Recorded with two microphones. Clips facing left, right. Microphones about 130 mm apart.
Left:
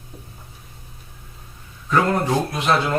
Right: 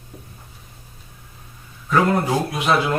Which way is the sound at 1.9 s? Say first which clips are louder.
Right 1 dB; 10° right (ahead or behind).